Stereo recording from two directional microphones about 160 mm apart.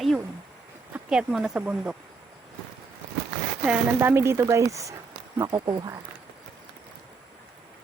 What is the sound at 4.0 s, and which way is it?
Speech, 15° right (ahead or behind).